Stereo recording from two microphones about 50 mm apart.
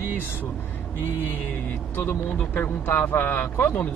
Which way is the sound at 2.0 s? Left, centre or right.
Left.